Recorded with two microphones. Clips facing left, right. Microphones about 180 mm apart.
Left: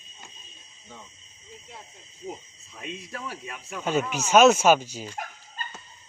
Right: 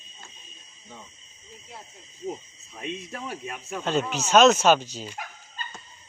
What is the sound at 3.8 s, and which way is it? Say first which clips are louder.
Speech: even; 10° left (ahead or behind).